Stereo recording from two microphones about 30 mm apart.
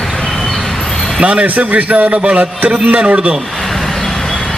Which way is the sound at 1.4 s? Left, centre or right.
Right.